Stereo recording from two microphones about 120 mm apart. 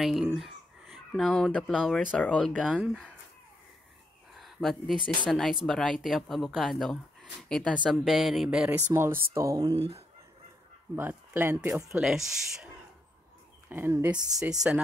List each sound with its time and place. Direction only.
0.0 s speech: centre (ahead or behind)
2.6 s speech: 5° right (ahead or behind)
4.3 s a sound: centre (ahead or behind)
5.3 s speech: centre (ahead or behind)
7.7 s speech: 5° right (ahead or behind)
8.9 s speech: 20° right (ahead or behind)
11.0 s speech: 20° right (ahead or behind)
11.9 s speech: 5° right (ahead or behind)
13.7 s speech: 20° right (ahead or behind)
14.4 s speech: 5° right (ahead or behind)